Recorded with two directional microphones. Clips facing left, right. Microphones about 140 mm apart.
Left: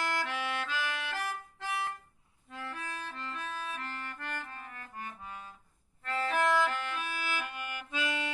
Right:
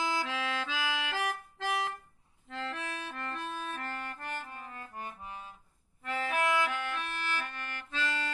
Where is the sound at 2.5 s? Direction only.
75° right (ahead or behind); by 4.2 s 50° right (ahead or behind).